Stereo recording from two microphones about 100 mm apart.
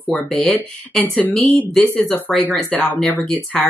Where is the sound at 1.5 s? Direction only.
15° left (ahead or behind).